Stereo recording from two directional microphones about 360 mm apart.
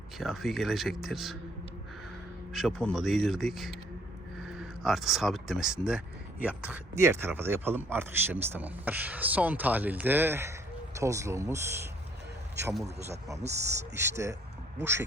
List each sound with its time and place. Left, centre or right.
0.2 s speech: centre
2.5 s speech: centre